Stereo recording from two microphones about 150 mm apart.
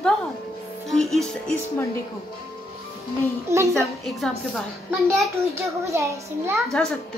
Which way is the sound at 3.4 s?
20° right (ahead or behind).